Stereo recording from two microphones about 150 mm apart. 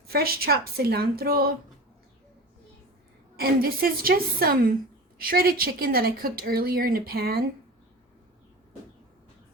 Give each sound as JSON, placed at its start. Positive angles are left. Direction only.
{"t": 0.1, "sound": "a woman's voice", "side_deg": -90}
{"t": 3.3, "sound": "speech", "side_deg": -80}